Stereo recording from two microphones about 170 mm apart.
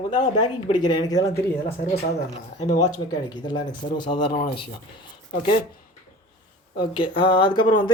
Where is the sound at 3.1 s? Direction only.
25° left (ahead or behind).